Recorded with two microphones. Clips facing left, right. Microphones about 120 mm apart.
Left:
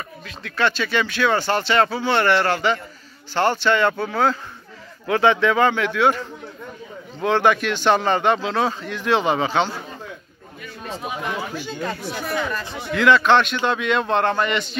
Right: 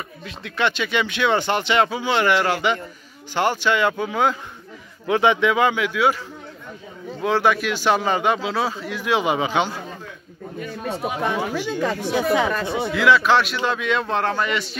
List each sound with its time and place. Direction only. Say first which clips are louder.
0.4 s speech: left 1 dB; 20° right (ahead or behind)
11.1 s speech: right 4 dB; 90° right; by 12.9 s 65° right (ahead or behind)
12.9 s a man's voice: left 2 dB; 5° right (ahead or behind)